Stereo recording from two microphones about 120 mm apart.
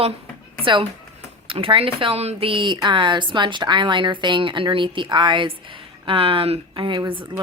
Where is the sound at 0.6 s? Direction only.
45° right (ahead or behind).